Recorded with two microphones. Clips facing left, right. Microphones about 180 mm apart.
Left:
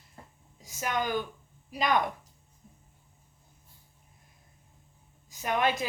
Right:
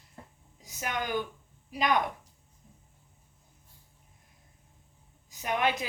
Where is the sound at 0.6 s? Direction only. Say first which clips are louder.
Left 2 dB; 15° right (ahead or behind).